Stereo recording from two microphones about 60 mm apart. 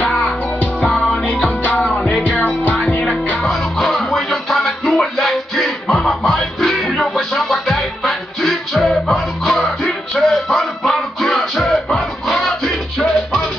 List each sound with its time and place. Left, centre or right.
1.6 s music: left
2.0 s music: centre
2.3 s music: left
3.3 s music: centre